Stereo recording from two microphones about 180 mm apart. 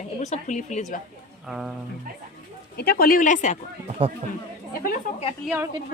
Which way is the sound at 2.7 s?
60° left (ahead or behind).